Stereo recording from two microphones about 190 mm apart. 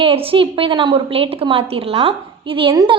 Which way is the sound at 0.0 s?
30° right (ahead or behind).